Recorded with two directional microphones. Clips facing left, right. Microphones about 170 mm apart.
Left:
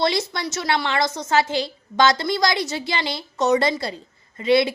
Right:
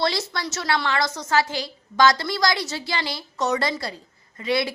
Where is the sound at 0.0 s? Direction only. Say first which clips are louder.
Left 3 dB; 20° left (ahead or behind).